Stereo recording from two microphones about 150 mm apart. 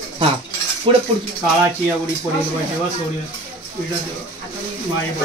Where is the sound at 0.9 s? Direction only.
35° right (ahead or behind).